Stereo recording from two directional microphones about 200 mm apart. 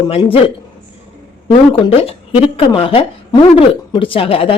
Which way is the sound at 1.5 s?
25° left (ahead or behind).